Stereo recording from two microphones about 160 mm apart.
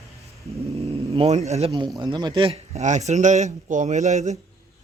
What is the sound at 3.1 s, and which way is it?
Speech, 45° right (ahead or behind).